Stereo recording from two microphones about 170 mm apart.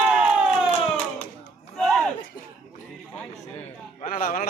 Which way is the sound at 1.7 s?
5° left (ahead or behind).